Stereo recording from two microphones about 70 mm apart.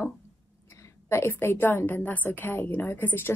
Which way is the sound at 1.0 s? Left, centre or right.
Left.